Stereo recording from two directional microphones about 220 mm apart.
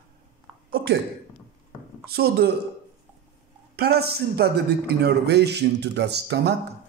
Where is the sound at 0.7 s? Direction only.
45° right (ahead or behind).